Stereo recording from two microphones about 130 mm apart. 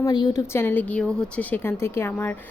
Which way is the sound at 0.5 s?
15° left (ahead or behind).